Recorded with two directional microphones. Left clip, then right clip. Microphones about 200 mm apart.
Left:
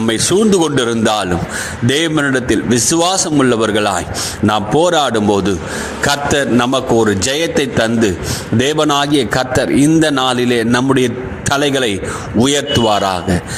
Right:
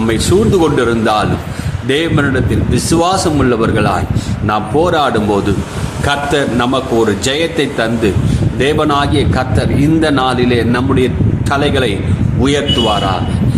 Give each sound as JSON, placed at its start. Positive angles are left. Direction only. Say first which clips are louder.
{"t": 0.1, "sound": "a man's voice", "louder": "even", "side_deg": 35}